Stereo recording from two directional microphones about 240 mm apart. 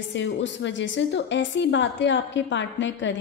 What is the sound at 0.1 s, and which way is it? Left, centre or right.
A woman's voice, left.